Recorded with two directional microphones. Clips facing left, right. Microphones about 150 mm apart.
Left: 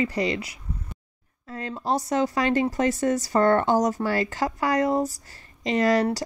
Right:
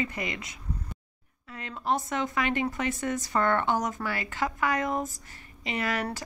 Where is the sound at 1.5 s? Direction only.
35° left (ahead or behind).